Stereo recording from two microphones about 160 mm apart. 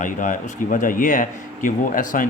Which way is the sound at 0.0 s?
55° left (ahead or behind).